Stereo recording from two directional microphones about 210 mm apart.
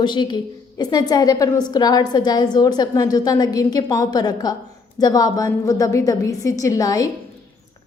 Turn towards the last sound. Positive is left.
turn(degrees=15)  # may be behind; listen again after turning